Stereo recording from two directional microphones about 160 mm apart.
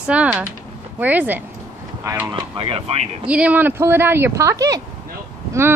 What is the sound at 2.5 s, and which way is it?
Speech, 35° right (ahead or behind).